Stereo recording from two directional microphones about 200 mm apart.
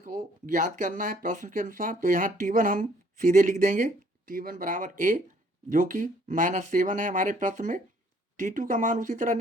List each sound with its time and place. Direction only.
0.0 s speech: 40° right (ahead or behind)